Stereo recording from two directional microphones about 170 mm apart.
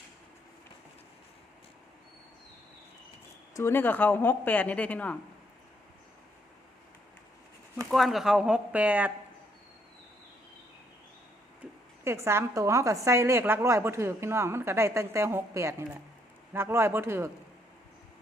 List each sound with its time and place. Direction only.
3.5 s speech: 15° left (ahead or behind)
7.9 s speech: centre (ahead or behind)
12.0 s a woman's voice: 15° right (ahead or behind)